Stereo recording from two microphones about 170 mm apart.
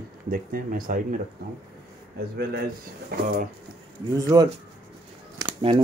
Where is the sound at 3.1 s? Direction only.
70° right (ahead or behind).